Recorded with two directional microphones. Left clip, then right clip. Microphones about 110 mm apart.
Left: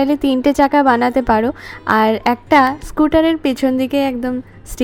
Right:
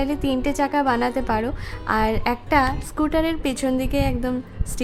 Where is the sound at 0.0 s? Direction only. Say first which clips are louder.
Left 8 dB; 45° left (ahead or behind).